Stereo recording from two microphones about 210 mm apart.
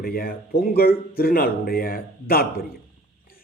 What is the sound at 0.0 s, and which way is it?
Speech, 45° left (ahead or behind).